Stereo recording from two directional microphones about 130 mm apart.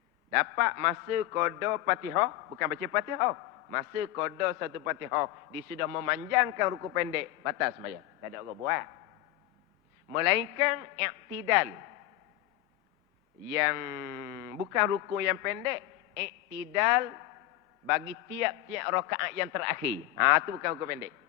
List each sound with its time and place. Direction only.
0.3 s a man's voice: 20° right (ahead or behind)
10.1 s a man's voice: 20° right (ahead or behind)
13.5 s a man's voice: 20° right (ahead or behind)